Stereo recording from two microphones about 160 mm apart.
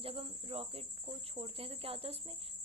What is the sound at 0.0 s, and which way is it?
Speech, 35° right (ahead or behind).